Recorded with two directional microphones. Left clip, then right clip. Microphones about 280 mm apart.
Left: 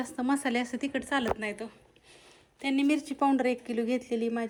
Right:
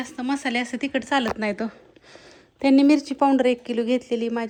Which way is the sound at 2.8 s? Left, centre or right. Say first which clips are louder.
Right 5 dB; centre.